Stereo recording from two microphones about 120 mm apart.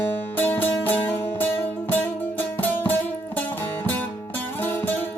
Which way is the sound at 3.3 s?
15° left (ahead or behind).